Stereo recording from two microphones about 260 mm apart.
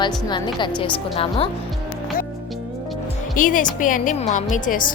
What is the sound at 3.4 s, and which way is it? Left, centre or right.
A woman's voice, left.